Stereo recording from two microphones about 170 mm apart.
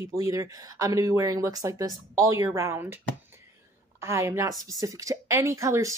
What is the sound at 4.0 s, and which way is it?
A woman's voice, 15° right (ahead or behind).